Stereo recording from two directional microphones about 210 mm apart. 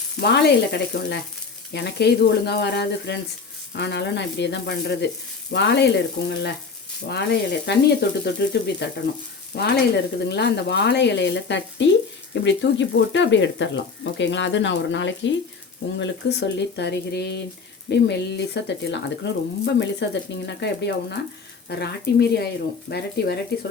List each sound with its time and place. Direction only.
0.2 s speech: 50° left (ahead or behind)
10.2 s speech: 50° left (ahead or behind)